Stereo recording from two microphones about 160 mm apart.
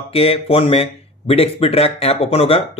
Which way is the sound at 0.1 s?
35° left (ahead or behind).